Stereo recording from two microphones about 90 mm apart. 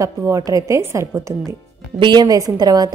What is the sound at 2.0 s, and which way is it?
Speech, 55° right (ahead or behind).